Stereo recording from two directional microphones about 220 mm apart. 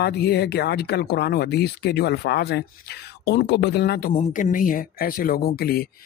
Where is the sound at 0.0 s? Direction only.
50° left (ahead or behind).